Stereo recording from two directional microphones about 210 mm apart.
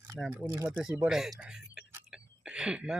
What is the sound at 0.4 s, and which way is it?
Speech, 15° right (ahead or behind).